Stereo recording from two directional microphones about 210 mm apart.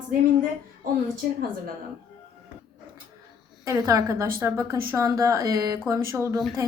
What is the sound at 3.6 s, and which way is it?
A woman's voice, 15° right (ahead or behind).